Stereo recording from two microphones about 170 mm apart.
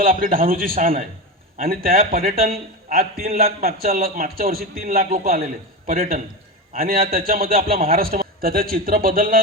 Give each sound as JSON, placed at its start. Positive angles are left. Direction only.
{"t": 0.0, "sound": "a man's voice", "side_deg": -55}